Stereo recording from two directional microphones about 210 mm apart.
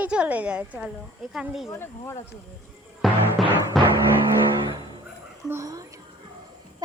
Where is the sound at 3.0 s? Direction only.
Centre (ahead or behind).